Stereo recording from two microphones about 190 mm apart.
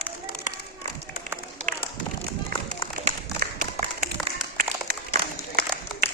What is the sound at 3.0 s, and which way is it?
Applause, 50° right (ahead or behind).